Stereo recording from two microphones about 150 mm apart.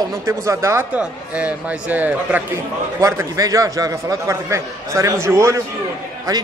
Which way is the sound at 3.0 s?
20° right (ahead or behind).